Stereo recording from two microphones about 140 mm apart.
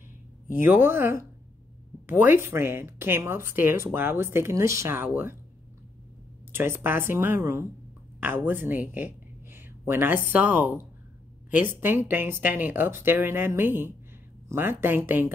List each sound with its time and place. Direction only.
0.5 s speech: 15° right (ahead or behind)
6.5 s speech: 15° right (ahead or behind)